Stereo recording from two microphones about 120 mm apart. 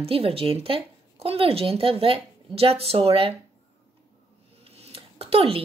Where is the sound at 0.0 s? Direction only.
50° right (ahead or behind).